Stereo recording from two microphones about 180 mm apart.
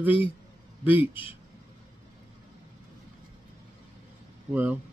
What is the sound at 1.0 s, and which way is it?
Speech, 30° left (ahead or behind).